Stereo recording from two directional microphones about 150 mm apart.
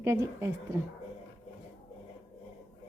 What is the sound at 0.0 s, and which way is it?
Speech, 20° right (ahead or behind).